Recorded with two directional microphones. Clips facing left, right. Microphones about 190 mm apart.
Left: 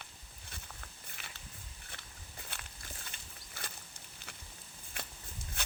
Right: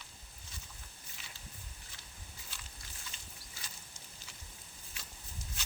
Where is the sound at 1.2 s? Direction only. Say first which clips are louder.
Left 3 dB; 60° left (ahead or behind).